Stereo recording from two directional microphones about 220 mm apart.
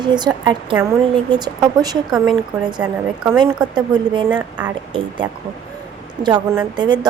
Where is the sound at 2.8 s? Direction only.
5° right (ahead or behind).